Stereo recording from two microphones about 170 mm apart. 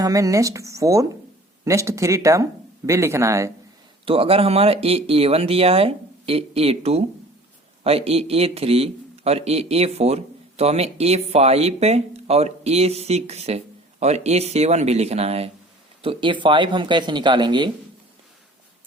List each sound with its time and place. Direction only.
0.0 s speech: 20° right (ahead or behind)
4.0 s speech: 30° right (ahead or behind)